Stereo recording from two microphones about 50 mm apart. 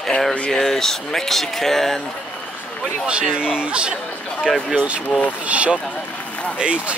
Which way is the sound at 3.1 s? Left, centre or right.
Centre.